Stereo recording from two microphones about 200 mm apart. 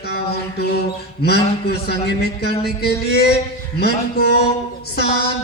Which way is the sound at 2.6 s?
55° left (ahead or behind).